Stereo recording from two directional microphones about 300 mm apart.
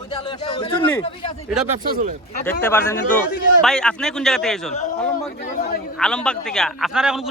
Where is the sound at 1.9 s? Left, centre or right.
Right.